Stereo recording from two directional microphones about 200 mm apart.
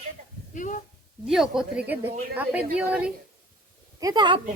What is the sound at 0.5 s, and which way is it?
Speech, 40° left (ahead or behind).